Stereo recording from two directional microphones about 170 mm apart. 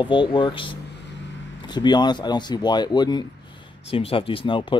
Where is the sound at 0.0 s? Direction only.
30° left (ahead or behind).